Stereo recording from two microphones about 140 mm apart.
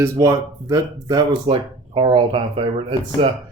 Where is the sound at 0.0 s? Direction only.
25° right (ahead or behind).